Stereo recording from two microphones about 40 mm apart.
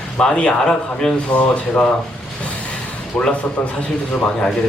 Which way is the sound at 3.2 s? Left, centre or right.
Left.